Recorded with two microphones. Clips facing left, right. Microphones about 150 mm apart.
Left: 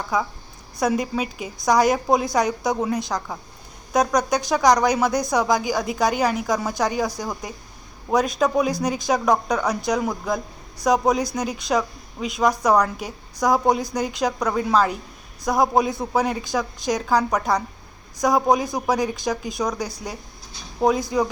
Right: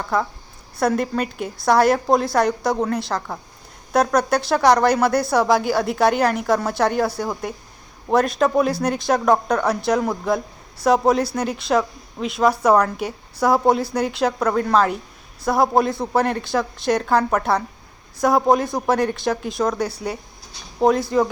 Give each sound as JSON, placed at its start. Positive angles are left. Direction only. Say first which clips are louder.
{"t": 0.0, "sound": "speech", "louder": "right 2 dB", "side_deg": 0}